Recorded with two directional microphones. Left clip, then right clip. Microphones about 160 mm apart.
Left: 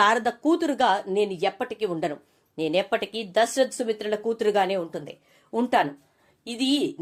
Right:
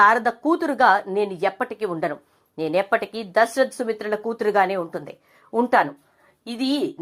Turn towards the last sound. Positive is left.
turn(degrees=0)  # may be behind; listen again after turning